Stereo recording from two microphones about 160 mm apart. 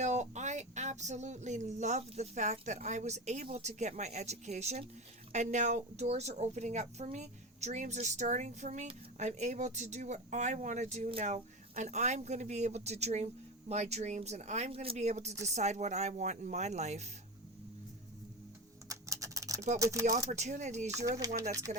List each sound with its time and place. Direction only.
0.0 s a woman's voice: 45° right (ahead or behind)
18.9 s typing: 20° right (ahead or behind)
19.8 s speech: 20° right (ahead or behind)
20.1 s a woman's voice: 45° right (ahead or behind)
20.9 s speech: 20° right (ahead or behind)
21.7 s speech: 45° right (ahead or behind)